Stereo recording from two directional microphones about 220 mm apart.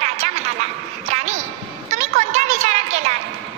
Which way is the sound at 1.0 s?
30° right (ahead or behind).